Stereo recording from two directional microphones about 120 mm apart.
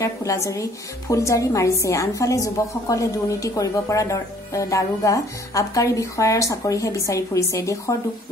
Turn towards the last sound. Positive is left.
turn(degrees=25)  # may be behind; listen again after turning